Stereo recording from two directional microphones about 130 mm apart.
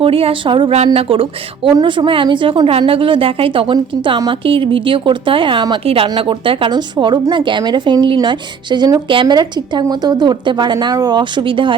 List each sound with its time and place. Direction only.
0.0 s a woman's voice: 45° right (ahead or behind)